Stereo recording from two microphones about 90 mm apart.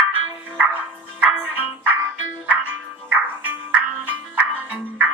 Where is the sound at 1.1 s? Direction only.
20° right (ahead or behind).